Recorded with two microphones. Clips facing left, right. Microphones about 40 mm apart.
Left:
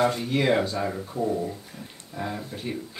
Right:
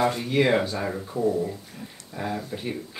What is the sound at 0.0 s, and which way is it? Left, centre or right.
Speech, centre.